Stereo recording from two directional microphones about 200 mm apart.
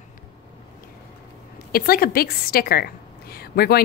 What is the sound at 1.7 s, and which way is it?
A woman's voice, 50° left (ahead or behind).